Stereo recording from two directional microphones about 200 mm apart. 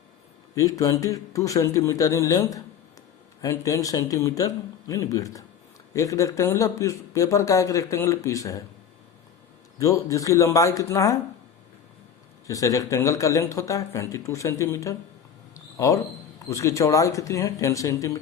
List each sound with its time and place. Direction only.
0.5 s speech: 15° left (ahead or behind)
9.7 s speech: 15° left (ahead or behind)
12.5 s speech: 15° left (ahead or behind)
15.5 s a sound: 15° left (ahead or behind)
16.5 s speech: 15° left (ahead or behind)